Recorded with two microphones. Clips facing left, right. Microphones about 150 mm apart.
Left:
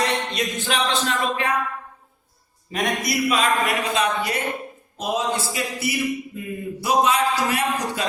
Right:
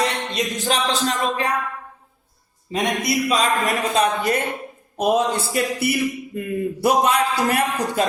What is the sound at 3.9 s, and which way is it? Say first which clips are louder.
A man's voice: right 4 dB; 50° right (ahead or behind).